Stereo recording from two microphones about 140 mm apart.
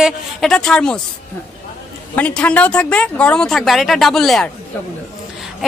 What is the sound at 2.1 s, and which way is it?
Speech, 10° left (ahead or behind).